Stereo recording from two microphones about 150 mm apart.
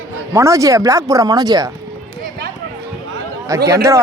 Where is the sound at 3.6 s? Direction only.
20° right (ahead or behind).